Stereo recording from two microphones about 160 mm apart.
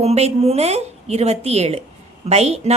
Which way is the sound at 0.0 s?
40° right (ahead or behind).